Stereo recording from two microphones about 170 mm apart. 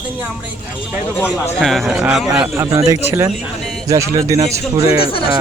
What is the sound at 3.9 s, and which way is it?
Speech, 20° right (ahead or behind).